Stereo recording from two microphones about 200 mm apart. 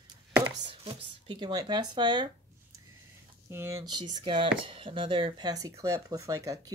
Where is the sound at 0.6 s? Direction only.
25° right (ahead or behind).